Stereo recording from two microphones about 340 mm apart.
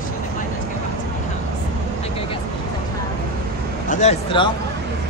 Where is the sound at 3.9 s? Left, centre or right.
Centre.